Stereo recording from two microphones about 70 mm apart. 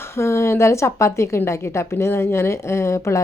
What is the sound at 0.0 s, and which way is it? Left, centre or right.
A woman's voice, left.